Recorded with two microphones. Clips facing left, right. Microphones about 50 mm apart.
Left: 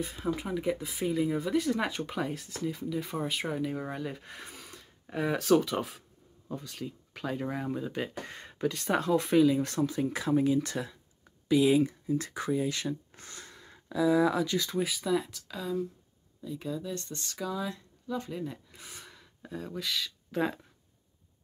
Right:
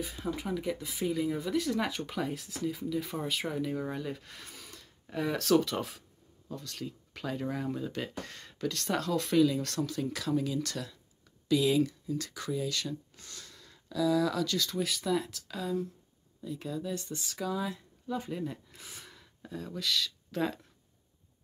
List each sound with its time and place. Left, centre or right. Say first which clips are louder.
0.1 s speech: left 2 dB; centre